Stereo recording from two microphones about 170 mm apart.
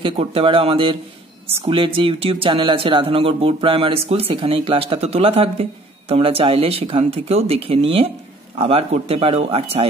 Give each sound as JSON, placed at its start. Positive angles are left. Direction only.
{"t": 0.0, "sound": "speech", "side_deg": -30}